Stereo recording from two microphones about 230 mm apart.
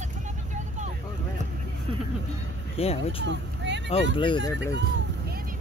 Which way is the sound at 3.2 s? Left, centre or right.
Right.